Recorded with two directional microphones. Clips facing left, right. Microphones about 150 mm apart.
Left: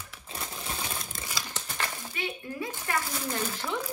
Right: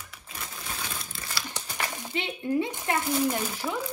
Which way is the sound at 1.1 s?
45° left (ahead or behind).